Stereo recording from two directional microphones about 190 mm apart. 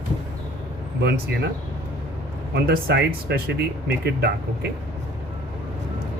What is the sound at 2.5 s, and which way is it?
Speech, 55° right (ahead or behind).